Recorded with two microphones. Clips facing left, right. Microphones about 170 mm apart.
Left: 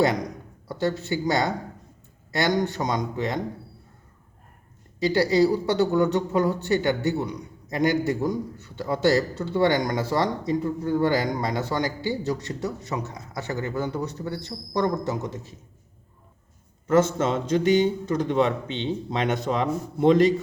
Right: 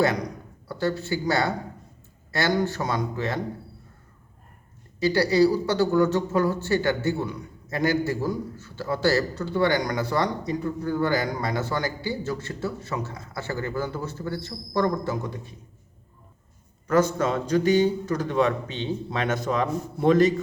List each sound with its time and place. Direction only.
0.0 s speech: 20° left (ahead or behind)
4.9 s speech: 20° left (ahead or behind)
16.8 s speech: 25° left (ahead or behind)